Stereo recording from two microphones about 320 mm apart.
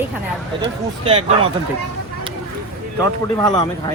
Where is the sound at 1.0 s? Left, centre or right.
Centre.